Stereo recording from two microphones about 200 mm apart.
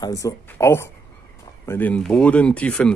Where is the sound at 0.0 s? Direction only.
15° left (ahead or behind).